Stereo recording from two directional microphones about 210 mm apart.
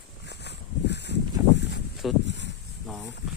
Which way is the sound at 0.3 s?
55° left (ahead or behind).